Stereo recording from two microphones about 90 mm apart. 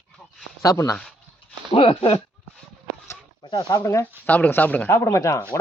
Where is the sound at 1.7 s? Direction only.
80° left.